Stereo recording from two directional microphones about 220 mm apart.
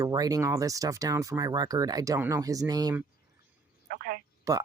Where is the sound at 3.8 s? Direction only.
40° right (ahead or behind).